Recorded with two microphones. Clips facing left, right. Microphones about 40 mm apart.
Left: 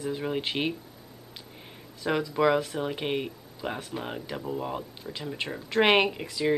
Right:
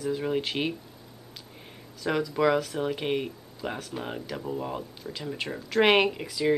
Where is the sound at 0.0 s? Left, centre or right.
Centre.